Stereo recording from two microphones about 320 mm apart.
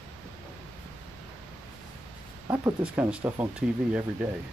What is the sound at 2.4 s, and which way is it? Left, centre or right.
Speech, centre.